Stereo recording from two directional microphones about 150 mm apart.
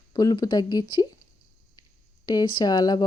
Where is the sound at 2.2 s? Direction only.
30° left (ahead or behind).